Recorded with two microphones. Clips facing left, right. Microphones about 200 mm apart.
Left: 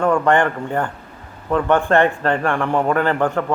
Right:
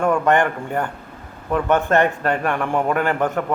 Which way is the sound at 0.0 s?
15° right (ahead or behind).